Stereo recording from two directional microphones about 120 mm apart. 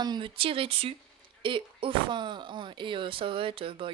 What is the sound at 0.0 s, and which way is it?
Speech, 40° right (ahead or behind).